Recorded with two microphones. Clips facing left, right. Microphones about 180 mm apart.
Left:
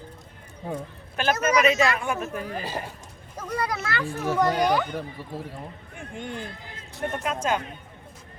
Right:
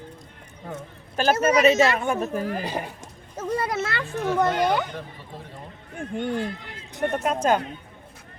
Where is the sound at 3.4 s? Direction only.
25° right (ahead or behind).